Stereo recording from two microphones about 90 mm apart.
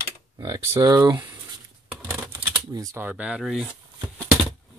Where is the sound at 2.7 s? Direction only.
40° right (ahead or behind).